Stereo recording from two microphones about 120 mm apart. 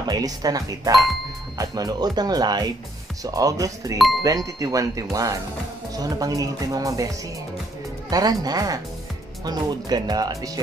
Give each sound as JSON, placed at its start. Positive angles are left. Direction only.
{"t": 0.1, "sound": "speech", "side_deg": -30}
{"t": 8.1, "sound": "speech", "side_deg": -30}